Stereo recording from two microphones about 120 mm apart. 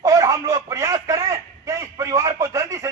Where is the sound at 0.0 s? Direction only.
25° right (ahead or behind).